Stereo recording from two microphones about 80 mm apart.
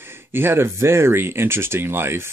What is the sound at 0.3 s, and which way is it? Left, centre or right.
Speech, right.